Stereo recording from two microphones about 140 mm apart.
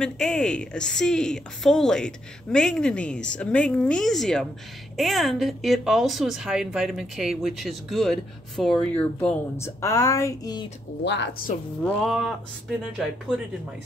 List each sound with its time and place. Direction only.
0.0 s a woman's voice: 5° left (ahead or behind)
9.6 s speech: 20° left (ahead or behind)
11.8 s a woman's voice: 5° left (ahead or behind)